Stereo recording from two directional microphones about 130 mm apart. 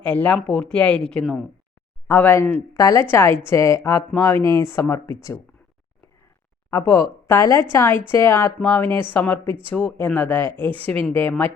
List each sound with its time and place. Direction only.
0.0 s speech: 10° left (ahead or behind)
2.0 s speech: 15° left (ahead or behind)
6.7 s speech: 20° left (ahead or behind)
9.4 s speech: 40° right (ahead or behind)
9.6 s speech: 15° left (ahead or behind)